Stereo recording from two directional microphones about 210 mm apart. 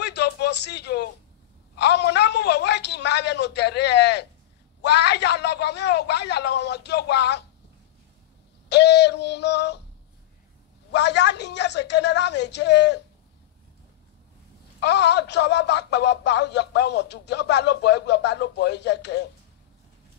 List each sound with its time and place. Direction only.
0.0 s a sound: 55° left (ahead or behind)
1.8 s a man's voice: 55° left (ahead or behind)
8.6 s speech: 55° left (ahead or behind)
10.9 s a woman's voice: 55° left (ahead or behind)
14.8 s speech: 55° left (ahead or behind)